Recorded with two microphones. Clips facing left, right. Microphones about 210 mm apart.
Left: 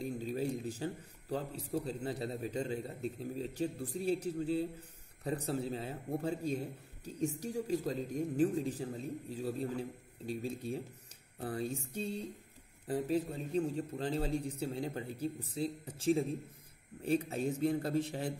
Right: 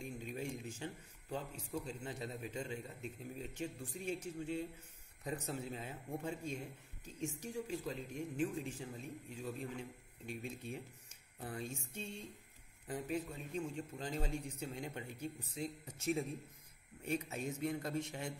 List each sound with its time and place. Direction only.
0.0 s a man's voice: 35° left (ahead or behind)